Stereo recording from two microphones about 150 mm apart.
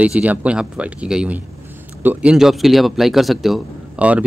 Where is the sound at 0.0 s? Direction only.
10° right (ahead or behind).